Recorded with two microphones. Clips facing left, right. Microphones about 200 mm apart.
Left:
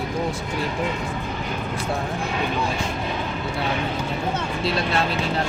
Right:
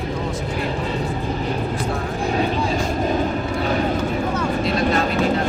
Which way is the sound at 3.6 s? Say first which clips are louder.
Right 5 dB; 40° right (ahead or behind).